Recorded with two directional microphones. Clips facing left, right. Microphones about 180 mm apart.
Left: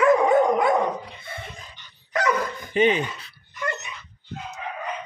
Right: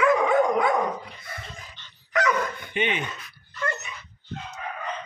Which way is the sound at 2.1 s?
35° left (ahead or behind).